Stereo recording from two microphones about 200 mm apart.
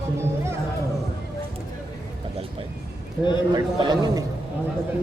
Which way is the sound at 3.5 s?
20° right (ahead or behind).